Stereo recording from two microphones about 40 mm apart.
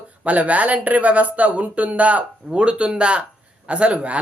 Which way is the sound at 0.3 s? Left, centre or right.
Right.